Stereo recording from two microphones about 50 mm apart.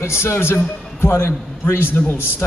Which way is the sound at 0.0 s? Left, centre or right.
Left.